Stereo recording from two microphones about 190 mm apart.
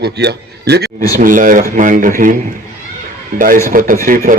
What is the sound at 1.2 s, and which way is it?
Speech, 45° right (ahead or behind).